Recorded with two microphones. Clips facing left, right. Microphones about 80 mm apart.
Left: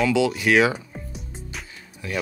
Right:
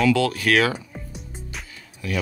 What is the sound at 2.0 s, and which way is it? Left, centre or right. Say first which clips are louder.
Speech: right 1 dB; left.